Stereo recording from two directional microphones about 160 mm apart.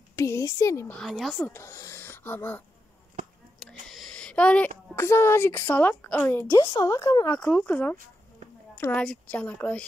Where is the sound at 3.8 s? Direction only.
Centre (ahead or behind).